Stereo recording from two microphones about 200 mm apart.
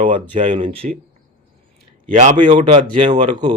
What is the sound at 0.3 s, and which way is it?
Speech, 30° right (ahead or behind).